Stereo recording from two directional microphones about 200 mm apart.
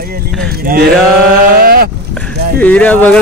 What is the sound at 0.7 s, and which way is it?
Speech, 50° right (ahead or behind).